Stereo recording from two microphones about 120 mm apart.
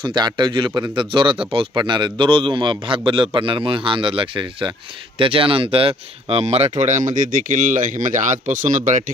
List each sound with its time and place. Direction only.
0.0 s a man's voice: 40° right (ahead or behind); by 6.7 s 60° right (ahead or behind)
6.7 s speech: 90° right